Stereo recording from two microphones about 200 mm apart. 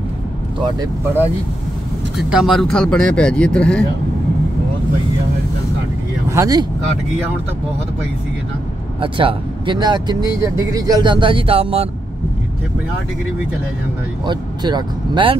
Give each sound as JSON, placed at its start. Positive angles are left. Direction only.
{"t": 2.1, "sound": "speech", "side_deg": -5}
{"t": 6.2, "sound": "speech", "side_deg": -15}
{"t": 9.0, "sound": "speech", "side_deg": -25}
{"t": 14.2, "sound": "speech", "side_deg": -20}